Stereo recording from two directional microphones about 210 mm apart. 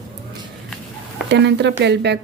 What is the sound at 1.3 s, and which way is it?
Speech, 55° right (ahead or behind).